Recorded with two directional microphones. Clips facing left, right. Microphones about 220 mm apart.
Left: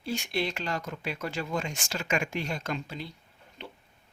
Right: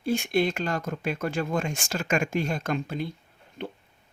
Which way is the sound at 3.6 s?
50° right (ahead or behind).